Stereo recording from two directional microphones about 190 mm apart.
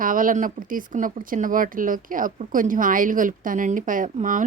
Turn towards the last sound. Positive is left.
turn(degrees=-45)  # may be behind; listen again after turning